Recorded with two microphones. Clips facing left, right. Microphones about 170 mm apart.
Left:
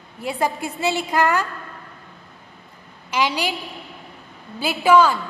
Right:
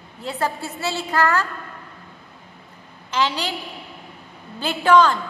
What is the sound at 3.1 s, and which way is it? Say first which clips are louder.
Speech: left 1 dB; 10° left (ahead or behind).